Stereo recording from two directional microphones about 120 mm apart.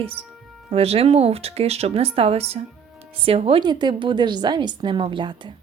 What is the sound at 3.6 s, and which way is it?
A woman's voice, 40° right (ahead or behind).